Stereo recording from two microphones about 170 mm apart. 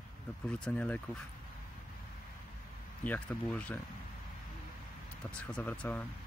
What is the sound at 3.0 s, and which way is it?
Speech, 10° left (ahead or behind).